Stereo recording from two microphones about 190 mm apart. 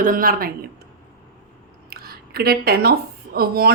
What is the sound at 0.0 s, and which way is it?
Speech, 45° right (ahead or behind).